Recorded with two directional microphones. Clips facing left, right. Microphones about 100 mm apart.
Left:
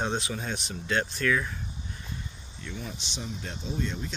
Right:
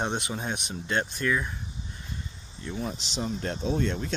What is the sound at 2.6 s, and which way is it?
Speech, 35° right (ahead or behind).